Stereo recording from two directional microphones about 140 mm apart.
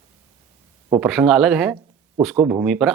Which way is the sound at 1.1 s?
5° right (ahead or behind).